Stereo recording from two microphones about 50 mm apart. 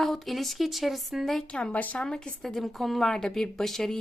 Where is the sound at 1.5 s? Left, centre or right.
Left.